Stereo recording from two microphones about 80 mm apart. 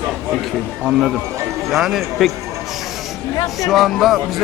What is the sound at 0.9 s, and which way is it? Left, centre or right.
A man's voice, centre.